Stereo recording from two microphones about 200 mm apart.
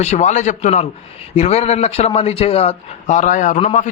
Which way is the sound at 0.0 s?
35° left (ahead or behind).